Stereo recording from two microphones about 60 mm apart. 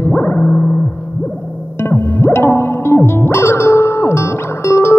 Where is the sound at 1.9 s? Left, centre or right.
Left.